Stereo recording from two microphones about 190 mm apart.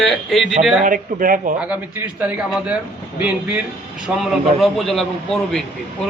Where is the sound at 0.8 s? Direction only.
45° right (ahead or behind).